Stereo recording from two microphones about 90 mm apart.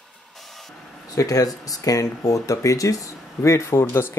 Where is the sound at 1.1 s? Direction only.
40° left (ahead or behind).